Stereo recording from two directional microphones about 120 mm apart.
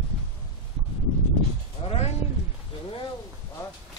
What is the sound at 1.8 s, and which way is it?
Speech, 55° left (ahead or behind).